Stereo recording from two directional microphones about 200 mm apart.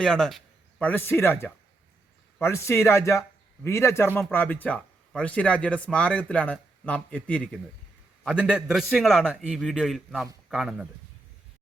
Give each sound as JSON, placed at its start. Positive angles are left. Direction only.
{"t": 0.0, "sound": "a man's voice", "side_deg": 5}